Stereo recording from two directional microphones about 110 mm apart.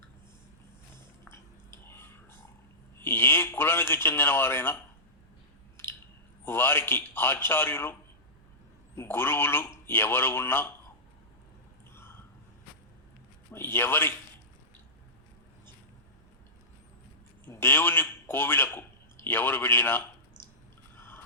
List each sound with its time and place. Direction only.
1.9 s a sound: 20° left (ahead or behind)
6.4 s speech: 20° left (ahead or behind)
9.0 s speech: 20° left (ahead or behind)
13.5 s a man's voice: 20° left (ahead or behind)
17.4 s a man's voice: 20° left (ahead or behind)
20.9 s a sound: 20° left (ahead or behind)